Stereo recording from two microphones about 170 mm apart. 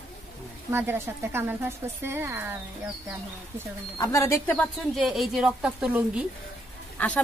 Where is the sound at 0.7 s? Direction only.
15° right (ahead or behind).